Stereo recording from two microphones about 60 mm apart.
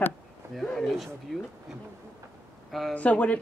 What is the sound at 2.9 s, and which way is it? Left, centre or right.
Speech, left.